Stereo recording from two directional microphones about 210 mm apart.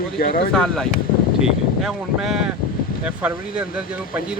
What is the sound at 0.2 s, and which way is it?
Speech, 45° left (ahead or behind).